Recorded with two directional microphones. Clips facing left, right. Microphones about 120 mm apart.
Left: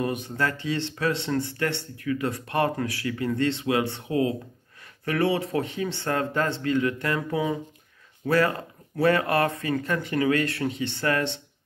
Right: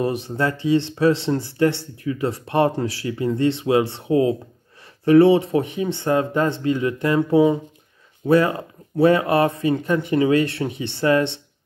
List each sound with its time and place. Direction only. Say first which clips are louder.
0.0 s speech: right 5 dB; 25° right (ahead or behind)